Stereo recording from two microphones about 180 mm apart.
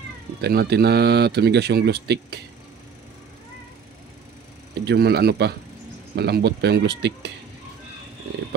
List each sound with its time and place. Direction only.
0.4 s speech: 65° right (ahead or behind)
4.7 s speech: 65° right (ahead or behind)